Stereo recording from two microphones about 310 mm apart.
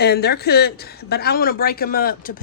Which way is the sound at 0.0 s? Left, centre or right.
Left.